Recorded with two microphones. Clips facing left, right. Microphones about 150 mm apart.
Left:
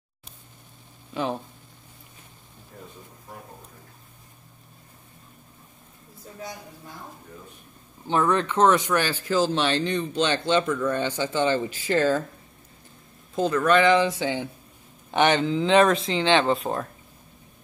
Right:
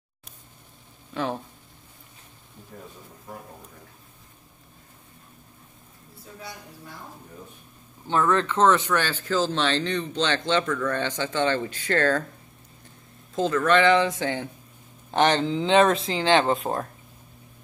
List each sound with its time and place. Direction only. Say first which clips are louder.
1.1 s speech: left 1 dB; 5° left (ahead or behind)
8.1 s speech: even; 15° left (ahead or behind)
13.3 s speech: left 1 dB; 5° left (ahead or behind)
15.6 s speech: even; 30° right (ahead or behind)
16.2 s speech: right 1 dB; 40° right (ahead or behind)
16.6 s speech: even; 10° right (ahead or behind)